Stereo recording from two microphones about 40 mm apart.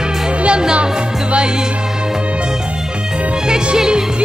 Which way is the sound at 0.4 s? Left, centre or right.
Right.